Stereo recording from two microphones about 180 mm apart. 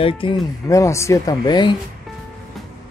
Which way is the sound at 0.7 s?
15° left (ahead or behind).